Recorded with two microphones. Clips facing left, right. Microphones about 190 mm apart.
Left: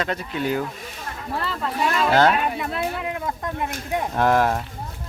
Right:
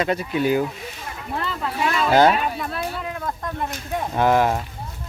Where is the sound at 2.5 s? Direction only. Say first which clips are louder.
Left 2 dB; 20° left (ahead or behind).